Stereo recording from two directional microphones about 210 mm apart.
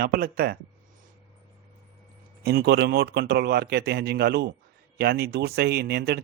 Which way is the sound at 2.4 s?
50° right (ahead or behind).